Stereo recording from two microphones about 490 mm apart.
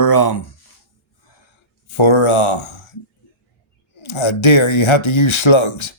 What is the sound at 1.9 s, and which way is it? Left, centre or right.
Speech, left.